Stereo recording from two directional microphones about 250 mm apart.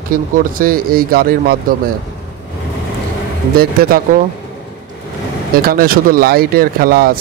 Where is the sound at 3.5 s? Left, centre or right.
Right.